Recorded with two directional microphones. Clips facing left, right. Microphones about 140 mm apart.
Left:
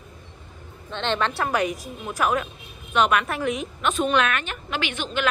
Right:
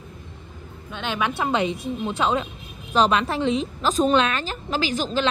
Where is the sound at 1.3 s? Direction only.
20° right (ahead or behind).